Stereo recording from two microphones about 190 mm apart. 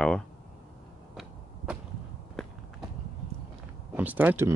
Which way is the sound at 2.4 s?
5° left (ahead or behind).